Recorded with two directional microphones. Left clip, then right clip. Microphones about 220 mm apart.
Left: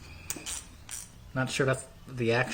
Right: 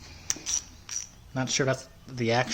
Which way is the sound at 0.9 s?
30° right (ahead or behind).